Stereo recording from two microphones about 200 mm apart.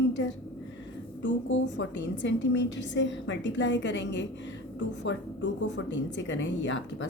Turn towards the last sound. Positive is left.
turn(degrees=70)  # may be behind; listen again after turning